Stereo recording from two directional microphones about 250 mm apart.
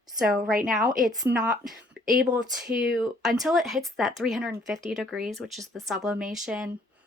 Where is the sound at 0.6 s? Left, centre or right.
Centre.